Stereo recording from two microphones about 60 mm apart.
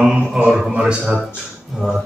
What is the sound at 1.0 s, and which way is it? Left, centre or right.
Speech, centre.